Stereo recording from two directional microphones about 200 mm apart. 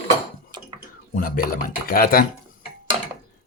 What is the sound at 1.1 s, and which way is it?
Speech, 45° left (ahead or behind).